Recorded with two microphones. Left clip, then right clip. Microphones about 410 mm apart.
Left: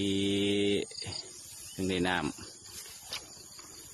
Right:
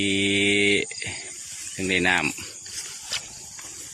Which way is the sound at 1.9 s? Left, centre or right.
Left.